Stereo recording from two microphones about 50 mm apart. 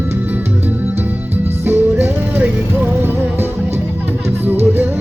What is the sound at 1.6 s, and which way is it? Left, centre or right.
Music, right.